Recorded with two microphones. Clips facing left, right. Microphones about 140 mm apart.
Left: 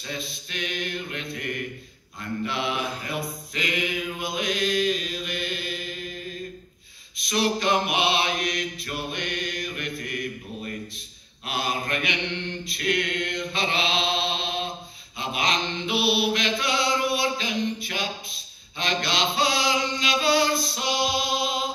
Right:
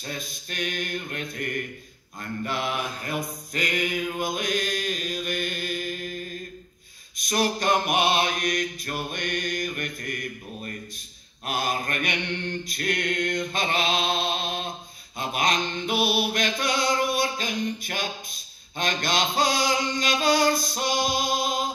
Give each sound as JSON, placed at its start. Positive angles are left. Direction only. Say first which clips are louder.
{"t": 0.0, "sound": "mantra", "louder": "left 1 dB", "side_deg": -45}
{"t": 7.2, "sound": "mantra", "louder": "even", "side_deg": -45}